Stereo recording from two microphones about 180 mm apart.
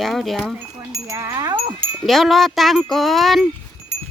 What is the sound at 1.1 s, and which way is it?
Speech, 20° right (ahead or behind).